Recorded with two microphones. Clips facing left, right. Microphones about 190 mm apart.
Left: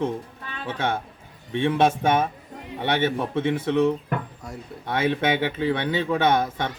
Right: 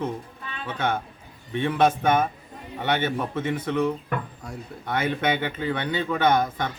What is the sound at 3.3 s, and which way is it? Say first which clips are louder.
A man's voice: left 3 dB; 20° left (ahead or behind).